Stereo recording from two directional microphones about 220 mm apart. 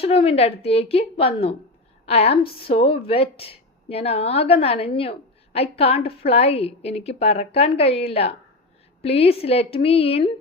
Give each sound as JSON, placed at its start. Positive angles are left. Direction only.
{"t": 0.0, "sound": "a woman's voice", "side_deg": 25}